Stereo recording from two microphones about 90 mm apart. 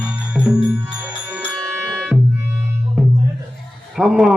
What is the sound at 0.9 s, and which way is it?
Music, 25° right (ahead or behind).